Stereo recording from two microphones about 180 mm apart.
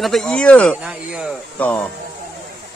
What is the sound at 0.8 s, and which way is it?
Speech, 5° right (ahead or behind).